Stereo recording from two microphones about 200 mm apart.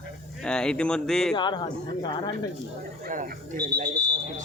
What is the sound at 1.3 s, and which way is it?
Speech, 20° left (ahead or behind).